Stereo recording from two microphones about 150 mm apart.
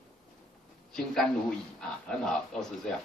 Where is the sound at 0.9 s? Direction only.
5° left (ahead or behind).